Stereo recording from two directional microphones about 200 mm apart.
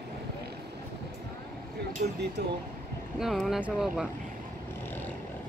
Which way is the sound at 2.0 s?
45° right (ahead or behind).